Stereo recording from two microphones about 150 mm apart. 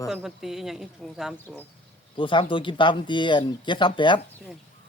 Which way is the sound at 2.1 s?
35° left (ahead or behind).